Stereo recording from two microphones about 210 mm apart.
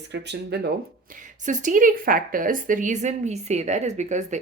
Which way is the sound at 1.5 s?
35° right (ahead or behind).